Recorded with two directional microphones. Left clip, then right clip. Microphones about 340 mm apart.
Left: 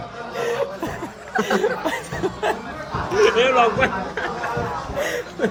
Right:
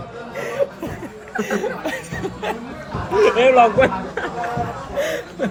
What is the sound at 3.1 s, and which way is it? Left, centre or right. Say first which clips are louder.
Speech: right 3 dB; centre.